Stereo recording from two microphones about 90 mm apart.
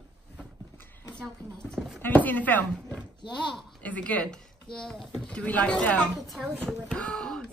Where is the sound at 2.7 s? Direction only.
10° left (ahead or behind).